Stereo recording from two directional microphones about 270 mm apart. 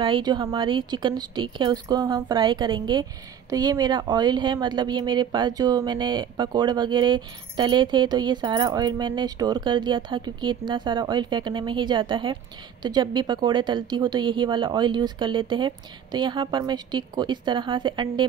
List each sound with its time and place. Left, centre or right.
0.0 s a woman's voice: centre